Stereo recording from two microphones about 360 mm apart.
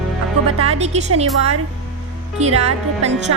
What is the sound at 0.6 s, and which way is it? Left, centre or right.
Music, centre.